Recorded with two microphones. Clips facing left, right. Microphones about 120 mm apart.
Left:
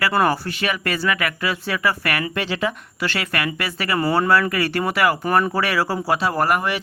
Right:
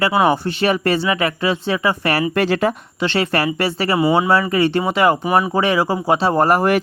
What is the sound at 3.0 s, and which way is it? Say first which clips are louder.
Speech: right 6 dB; 30° right (ahead or behind).